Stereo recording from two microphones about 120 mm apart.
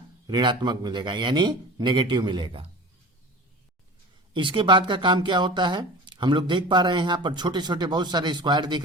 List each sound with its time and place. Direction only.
0.3 s speech: 35° right (ahead or behind)
4.4 s speech: 40° right (ahead or behind)